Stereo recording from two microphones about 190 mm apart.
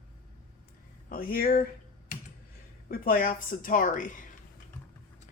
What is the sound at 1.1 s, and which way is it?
Speech, 50° left (ahead or behind).